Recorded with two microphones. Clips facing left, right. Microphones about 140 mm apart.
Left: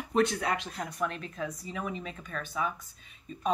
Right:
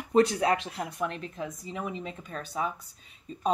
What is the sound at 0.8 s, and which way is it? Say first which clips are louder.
Speech: right 1 dB; 25° right (ahead or behind).